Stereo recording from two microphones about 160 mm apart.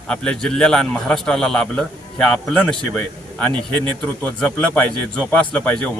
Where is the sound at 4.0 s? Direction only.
5° left (ahead or behind).